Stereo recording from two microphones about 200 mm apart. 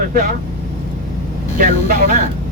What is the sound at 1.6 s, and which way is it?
Speech, 45° right (ahead or behind).